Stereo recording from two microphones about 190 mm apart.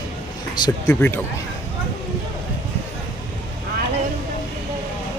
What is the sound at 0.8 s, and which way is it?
Speech, 10° left (ahead or behind).